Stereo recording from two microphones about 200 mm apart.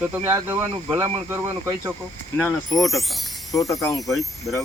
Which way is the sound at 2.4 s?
15° left (ahead or behind).